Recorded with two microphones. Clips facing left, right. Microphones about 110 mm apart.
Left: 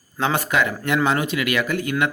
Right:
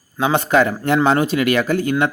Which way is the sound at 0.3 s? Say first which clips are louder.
Right 9 dB; 35° right (ahead or behind).